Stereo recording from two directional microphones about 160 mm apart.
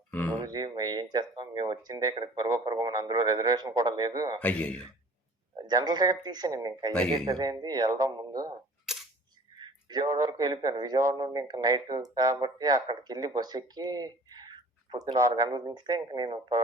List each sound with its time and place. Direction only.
0.1 s speech: 10° left (ahead or behind)
0.3 s speech: 25° right (ahead or behind)
4.4 s a man's voice: 10° left (ahead or behind)
5.5 s speech: 25° right (ahead or behind)
6.9 s speech: 5° left (ahead or behind)
7.3 s speech: 25° right (ahead or behind)
8.9 s camera: centre (ahead or behind)
9.6 s speech: 25° right (ahead or behind)